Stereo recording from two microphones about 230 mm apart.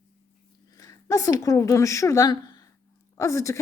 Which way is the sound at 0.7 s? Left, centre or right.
Centre.